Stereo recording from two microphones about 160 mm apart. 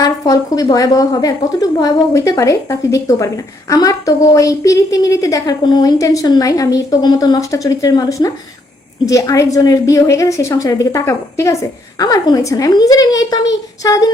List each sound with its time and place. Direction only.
0.0 s a woman's voice: 20° left (ahead or behind)